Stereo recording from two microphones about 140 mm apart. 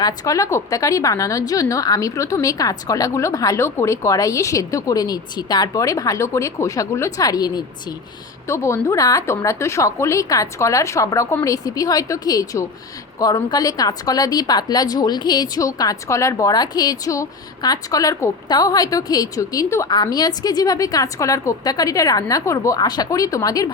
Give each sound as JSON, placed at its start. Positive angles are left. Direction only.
{"t": 0.0, "sound": "a woman's voice", "side_deg": 25}